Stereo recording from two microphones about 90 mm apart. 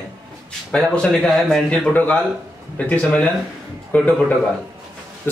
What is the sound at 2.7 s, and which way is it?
A man's voice, 15° left (ahead or behind).